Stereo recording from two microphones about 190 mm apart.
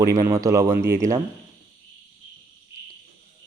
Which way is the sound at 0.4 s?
15° right (ahead or behind).